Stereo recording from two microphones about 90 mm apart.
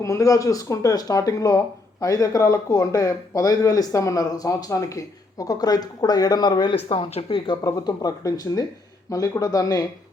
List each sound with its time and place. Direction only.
0.0 s speech: 35° left (ahead or behind); by 6.7 s 55° left (ahead or behind)
6.8 s speech: 85° left
7.6 s speech: 45° left (ahead or behind)